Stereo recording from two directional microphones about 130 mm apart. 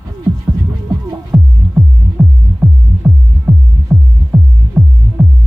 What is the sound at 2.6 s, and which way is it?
Music, 10° right (ahead or behind).